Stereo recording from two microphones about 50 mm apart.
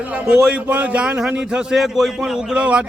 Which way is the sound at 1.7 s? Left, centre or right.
Centre.